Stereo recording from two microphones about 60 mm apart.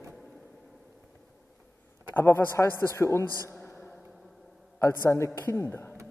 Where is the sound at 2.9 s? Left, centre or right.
Left.